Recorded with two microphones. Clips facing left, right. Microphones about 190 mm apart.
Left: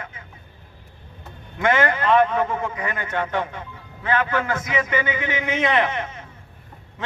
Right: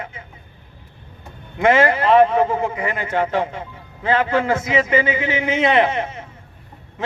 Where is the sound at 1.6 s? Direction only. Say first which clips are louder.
Right 5 dB; 25° right (ahead or behind).